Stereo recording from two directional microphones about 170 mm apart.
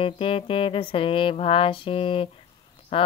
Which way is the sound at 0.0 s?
30° left (ahead or behind).